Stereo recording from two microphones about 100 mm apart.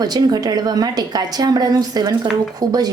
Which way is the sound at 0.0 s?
40° right (ahead or behind).